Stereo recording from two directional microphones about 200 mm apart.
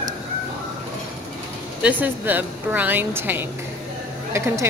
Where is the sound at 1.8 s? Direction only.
10° right (ahead or behind).